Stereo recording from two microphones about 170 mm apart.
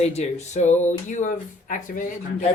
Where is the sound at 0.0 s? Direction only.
40° left (ahead or behind).